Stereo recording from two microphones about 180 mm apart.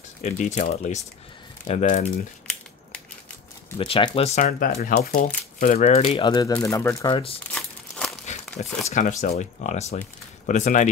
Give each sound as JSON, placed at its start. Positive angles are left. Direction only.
{"t": 0.2, "sound": "speech", "side_deg": 40}
{"t": 3.7, "sound": "speech", "side_deg": 30}
{"t": 7.1, "sound": "speech", "side_deg": 30}
{"t": 8.3, "sound": "a sound", "side_deg": 40}
{"t": 8.8, "sound": "speech", "side_deg": 45}